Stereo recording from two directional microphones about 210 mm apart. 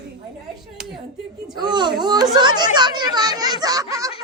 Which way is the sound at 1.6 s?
20° right (ahead or behind).